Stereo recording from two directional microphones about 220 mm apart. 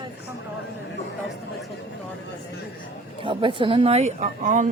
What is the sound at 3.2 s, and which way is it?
Speech, 25° right (ahead or behind).